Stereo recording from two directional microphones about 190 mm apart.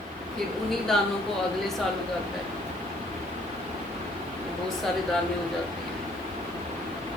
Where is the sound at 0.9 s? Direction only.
5° left (ahead or behind).